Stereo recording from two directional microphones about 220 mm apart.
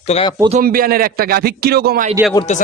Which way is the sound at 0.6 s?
40° right (ahead or behind).